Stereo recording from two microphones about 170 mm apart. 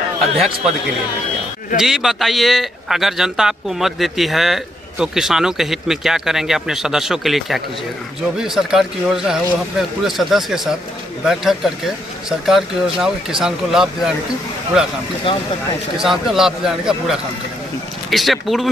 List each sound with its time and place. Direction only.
1.8 s a man's voice: centre (ahead or behind)
15.3 s speech: 30° left (ahead or behind)
16.0 s a man's voice: centre (ahead or behind)